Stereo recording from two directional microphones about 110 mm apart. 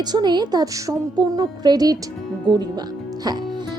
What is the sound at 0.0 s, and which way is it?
Speech, 40° right (ahead or behind).